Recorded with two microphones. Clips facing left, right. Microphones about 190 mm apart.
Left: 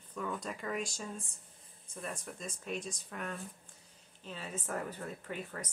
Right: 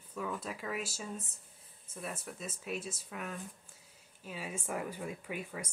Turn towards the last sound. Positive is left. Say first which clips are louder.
# right 1 dB
turn(degrees=-10)  # may be behind; listen again after turning